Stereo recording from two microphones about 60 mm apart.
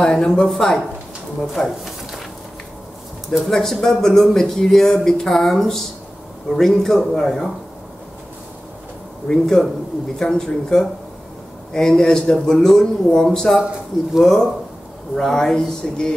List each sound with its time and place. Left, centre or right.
0.0 s speech: centre
3.3 s speech: centre
9.3 s speech: centre